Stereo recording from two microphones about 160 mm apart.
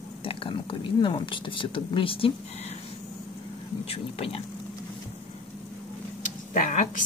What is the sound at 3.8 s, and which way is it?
Speech, 35° left (ahead or behind).